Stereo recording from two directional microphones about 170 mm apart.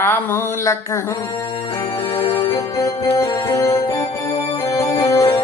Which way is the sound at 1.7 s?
15° left (ahead or behind).